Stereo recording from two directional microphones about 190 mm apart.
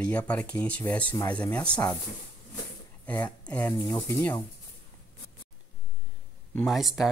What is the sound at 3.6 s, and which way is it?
Speech, 20° left (ahead or behind).